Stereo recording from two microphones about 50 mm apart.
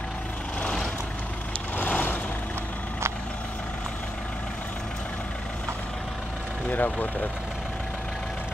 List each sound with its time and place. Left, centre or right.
1.8 s vehicle: left
6.7 s speech: left